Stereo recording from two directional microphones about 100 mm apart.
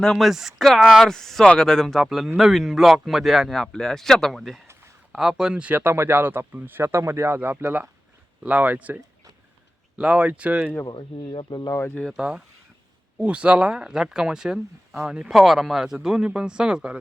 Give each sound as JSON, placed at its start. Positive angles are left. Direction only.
{"t": 0.0, "sound": "speech", "side_deg": 5}
{"t": 4.7, "sound": "a sound", "side_deg": -25}
{"t": 5.1, "sound": "speech", "side_deg": -5}
{"t": 10.0, "sound": "speech", "side_deg": -15}
{"t": 10.8, "sound": "speech", "side_deg": 55}
{"t": 11.7, "sound": "speech", "side_deg": 25}
{"t": 12.1, "sound": "speech", "side_deg": -5}